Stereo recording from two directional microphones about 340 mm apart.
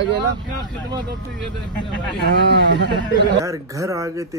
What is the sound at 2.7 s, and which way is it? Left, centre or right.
Speech, right.